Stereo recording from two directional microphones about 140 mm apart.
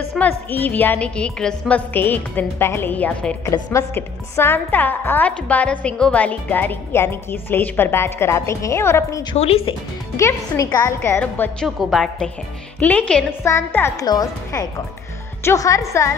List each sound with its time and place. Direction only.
0.2 s a woman's voice: 10° left (ahead or behind)
3.4 s a woman's voice: 20° left (ahead or behind)
9.4 s speech: 45° left (ahead or behind)
10.1 s speech: 25° left (ahead or behind)
11.6 s a woman's voice: centre (ahead or behind); by 16.2 s 20° left (ahead or behind)